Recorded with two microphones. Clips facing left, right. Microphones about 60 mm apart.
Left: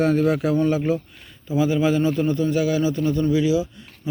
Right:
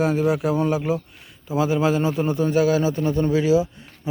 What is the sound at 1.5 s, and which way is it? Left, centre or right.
A man's voice, right.